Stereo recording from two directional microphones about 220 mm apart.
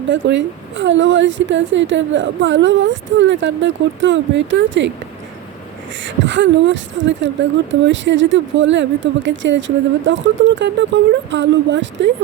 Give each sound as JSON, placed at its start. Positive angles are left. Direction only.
{"t": 0.1, "sound": "a woman's voice", "side_deg": -55}
{"t": 6.1, "sound": "a woman's voice", "side_deg": -55}